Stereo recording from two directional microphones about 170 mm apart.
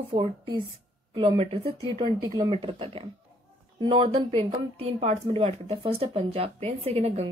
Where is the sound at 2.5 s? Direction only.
35° right (ahead or behind).